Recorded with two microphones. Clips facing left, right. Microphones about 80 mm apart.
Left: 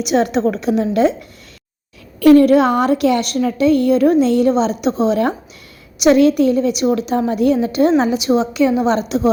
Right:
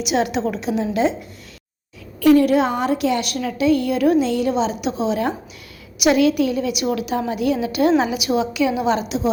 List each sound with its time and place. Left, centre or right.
0.0 s a woman's voice: left
2.1 s a woman's voice: left